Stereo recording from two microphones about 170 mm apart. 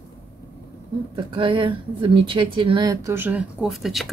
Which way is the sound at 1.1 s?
30° right (ahead or behind).